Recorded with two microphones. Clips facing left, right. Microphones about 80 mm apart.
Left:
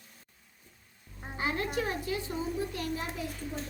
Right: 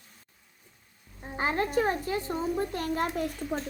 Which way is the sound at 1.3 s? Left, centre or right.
Right.